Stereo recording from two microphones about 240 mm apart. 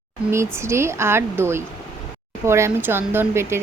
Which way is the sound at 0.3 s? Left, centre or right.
Centre.